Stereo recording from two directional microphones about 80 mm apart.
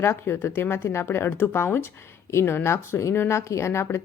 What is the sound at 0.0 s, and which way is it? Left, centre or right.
Speech, left.